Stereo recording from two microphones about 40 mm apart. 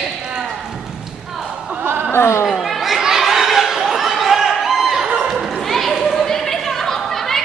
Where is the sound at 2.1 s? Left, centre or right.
Left.